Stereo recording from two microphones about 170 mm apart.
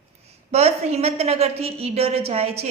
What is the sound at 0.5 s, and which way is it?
A woman's voice, 40° right (ahead or behind).